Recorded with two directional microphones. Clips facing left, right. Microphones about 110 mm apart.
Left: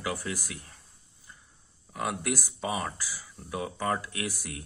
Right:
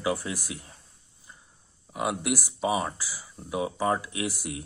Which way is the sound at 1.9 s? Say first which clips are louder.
Right 3 dB; 20° right (ahead or behind).